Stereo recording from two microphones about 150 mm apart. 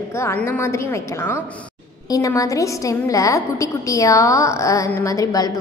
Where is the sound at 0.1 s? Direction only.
15° left (ahead or behind).